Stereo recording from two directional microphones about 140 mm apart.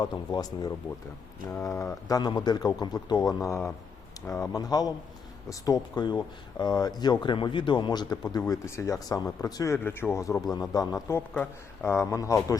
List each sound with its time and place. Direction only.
0.0 s speech: 30° left (ahead or behind)